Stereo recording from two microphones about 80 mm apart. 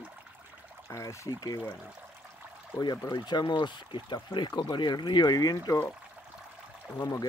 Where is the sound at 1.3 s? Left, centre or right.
Left.